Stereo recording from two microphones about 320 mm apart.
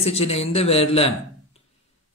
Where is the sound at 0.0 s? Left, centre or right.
Centre.